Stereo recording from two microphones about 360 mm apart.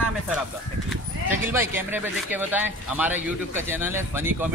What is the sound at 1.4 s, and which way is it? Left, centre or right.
Speech, centre.